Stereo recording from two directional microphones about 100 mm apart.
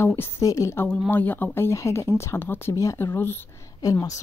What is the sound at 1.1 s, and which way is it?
Speech, 20° left (ahead or behind).